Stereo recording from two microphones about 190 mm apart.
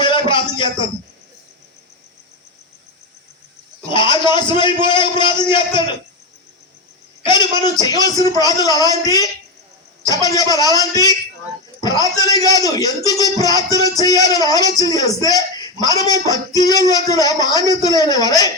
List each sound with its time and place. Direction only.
0.0 s a sound: 25° left (ahead or behind)
3.8 s a man's voice: 25° left (ahead or behind)
7.2 s a man's voice: 25° left (ahead or behind)